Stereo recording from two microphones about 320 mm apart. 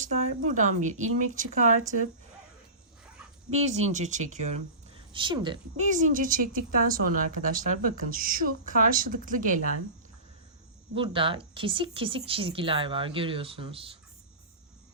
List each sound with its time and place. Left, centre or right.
0.0 s a woman's voice: right
3.5 s a woman's voice: right
10.9 s speech: centre